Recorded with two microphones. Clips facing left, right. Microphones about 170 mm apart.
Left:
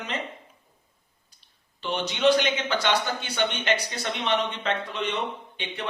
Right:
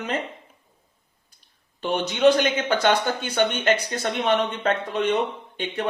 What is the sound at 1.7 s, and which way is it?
Speech, 50° right (ahead or behind).